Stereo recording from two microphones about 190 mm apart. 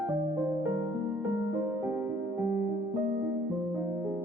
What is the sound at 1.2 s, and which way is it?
Music, 10° right (ahead or behind).